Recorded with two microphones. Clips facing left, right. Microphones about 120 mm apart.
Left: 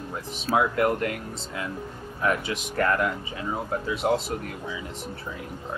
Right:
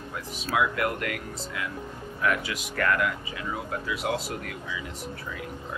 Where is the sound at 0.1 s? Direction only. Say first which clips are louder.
Left 4 dB; 35° left (ahead or behind).